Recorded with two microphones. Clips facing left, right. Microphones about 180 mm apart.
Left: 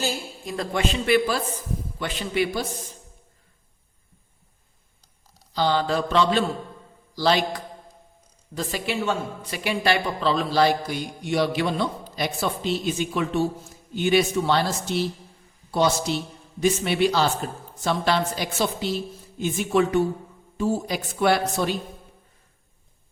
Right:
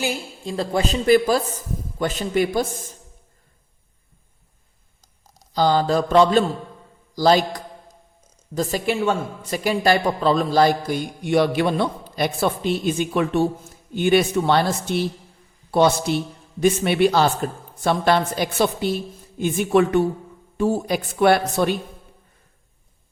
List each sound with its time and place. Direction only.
0.4 s a woman's voice: 30° right (ahead or behind); by 2.9 s 50° right (ahead or behind)
5.5 s a woman's voice: 40° right (ahead or behind); by 21.8 s 60° right (ahead or behind)